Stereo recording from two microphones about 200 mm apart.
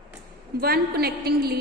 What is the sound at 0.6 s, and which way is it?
Speech, 50° right (ahead or behind).